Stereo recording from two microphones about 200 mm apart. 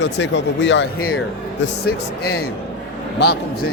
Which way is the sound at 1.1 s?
70° left (ahead or behind).